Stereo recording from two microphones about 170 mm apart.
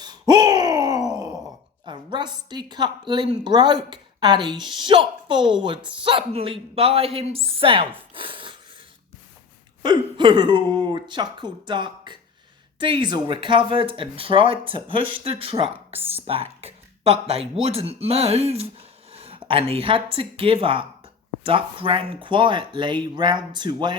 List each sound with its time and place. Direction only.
0.0 s a sound: 25° right (ahead or behind)
1.8 s a woman's voice: 25° right (ahead or behind)
8.1 s wood: 30° right (ahead or behind)
9.8 s a woman's voice: 25° right (ahead or behind)